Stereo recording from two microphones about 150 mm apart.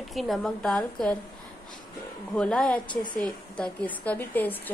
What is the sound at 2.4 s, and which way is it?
A woman's voice, 5° left (ahead or behind).